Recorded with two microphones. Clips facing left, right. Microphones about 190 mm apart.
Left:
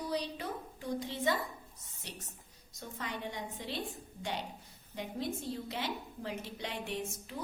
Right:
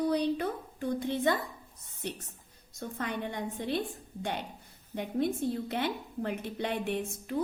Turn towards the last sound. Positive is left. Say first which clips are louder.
# right 7 dB
turn(degrees=-55)  # may be behind; listen again after turning